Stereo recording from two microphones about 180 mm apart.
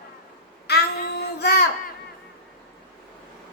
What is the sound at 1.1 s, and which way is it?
Child singing, 65° left (ahead or behind).